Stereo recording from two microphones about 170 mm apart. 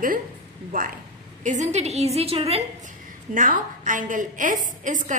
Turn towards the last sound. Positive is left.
turn(degrees=-50)  # may be behind; listen again after turning